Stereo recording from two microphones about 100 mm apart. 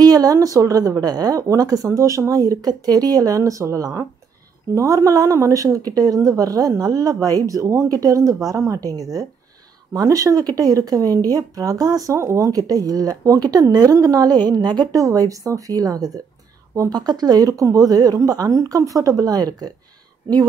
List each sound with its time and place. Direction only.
0.0 s speech: 40° right (ahead or behind)